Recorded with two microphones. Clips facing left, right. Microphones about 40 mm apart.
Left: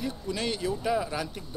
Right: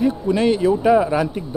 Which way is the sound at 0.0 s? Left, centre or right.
Right.